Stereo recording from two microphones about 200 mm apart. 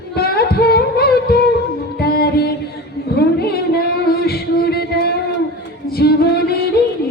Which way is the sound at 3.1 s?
50° left (ahead or behind).